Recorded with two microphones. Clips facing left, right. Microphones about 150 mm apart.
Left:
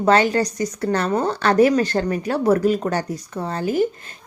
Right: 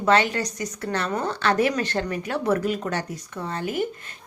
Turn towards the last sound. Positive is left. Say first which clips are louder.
# left 6 dB
turn(degrees=35)  # may be behind; listen again after turning